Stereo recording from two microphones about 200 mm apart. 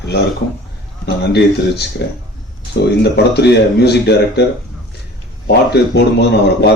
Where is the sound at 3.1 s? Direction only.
55° left (ahead or behind).